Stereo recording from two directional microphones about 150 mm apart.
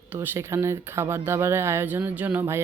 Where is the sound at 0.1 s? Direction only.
15° right (ahead or behind).